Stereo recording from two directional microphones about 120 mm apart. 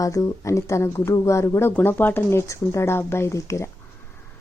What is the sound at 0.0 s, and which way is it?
Speech, 30° left (ahead or behind).